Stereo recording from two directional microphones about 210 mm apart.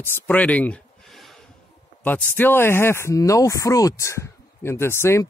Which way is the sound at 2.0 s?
10° left (ahead or behind).